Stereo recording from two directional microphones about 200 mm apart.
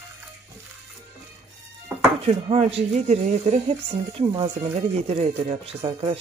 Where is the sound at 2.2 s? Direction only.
30° right (ahead or behind).